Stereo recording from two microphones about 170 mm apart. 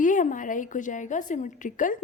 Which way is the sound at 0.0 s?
50° left (ahead or behind).